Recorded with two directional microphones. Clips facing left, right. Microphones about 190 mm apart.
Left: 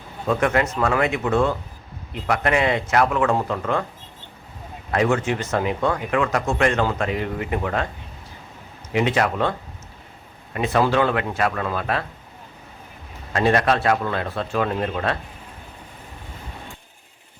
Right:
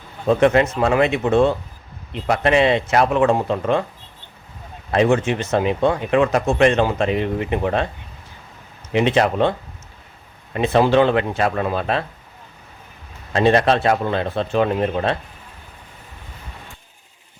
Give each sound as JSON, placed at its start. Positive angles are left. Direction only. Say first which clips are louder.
{"t": 0.3, "sound": "speech", "louder": "right 5 dB", "side_deg": -25}
{"t": 4.9, "sound": "speech", "louder": "right 4 dB", "side_deg": -25}
{"t": 8.9, "sound": "speech", "louder": "right 4 dB", "side_deg": -25}
{"t": 13.3, "sound": "speech", "louder": "right 3 dB", "side_deg": -25}